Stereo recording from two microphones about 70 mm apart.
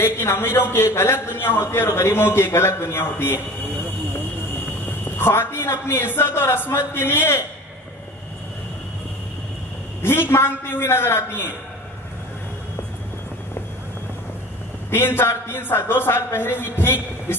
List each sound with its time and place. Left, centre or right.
0.0 s a man's voice: left
5.2 s a man's voice: left
10.3 s a man's voice: left
14.9 s a man's voice: left